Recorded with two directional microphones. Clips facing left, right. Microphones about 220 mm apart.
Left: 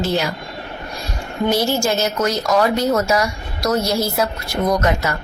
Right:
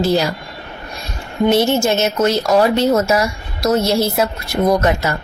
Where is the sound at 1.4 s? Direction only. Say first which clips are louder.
Right 4 dB; 25° right (ahead or behind).